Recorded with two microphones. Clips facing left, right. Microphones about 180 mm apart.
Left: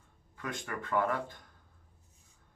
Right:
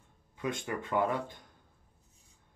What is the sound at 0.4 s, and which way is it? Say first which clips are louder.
Speech: right 4 dB; 20° right (ahead or behind).